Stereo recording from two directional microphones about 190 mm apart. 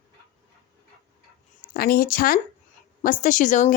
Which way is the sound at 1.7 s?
50° left (ahead or behind).